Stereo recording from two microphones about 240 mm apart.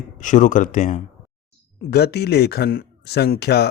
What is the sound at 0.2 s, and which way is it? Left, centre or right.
Speech, left.